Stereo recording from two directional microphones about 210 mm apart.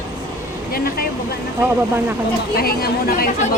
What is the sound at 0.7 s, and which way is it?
Speech, 45° left (ahead or behind).